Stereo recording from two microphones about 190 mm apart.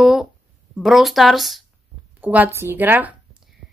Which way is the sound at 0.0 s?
Centre (ahead or behind).